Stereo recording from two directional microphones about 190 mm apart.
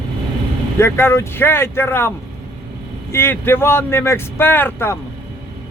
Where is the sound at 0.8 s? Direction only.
10° left (ahead or behind).